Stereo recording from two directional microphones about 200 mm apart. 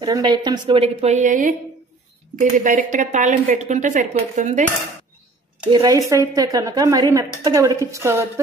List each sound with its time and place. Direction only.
0.0 s a woman's voice: 20° right (ahead or behind); by 1.5 s 40° right (ahead or behind)
2.5 s a woman's voice: 40° right (ahead or behind)
5.7 s a woman's voice: 20° right (ahead or behind)